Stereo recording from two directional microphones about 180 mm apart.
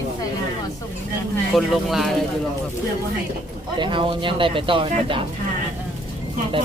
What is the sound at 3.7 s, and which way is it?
Speech, 25° right (ahead or behind).